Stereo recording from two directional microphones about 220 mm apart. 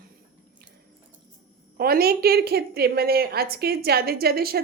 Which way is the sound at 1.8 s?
45° right (ahead or behind).